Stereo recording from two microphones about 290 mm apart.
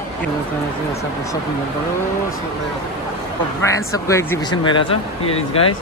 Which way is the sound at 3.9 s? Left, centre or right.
Centre.